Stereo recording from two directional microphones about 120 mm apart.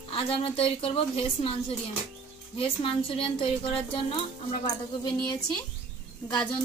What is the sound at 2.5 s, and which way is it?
A woman's voice, 50° left (ahead or behind).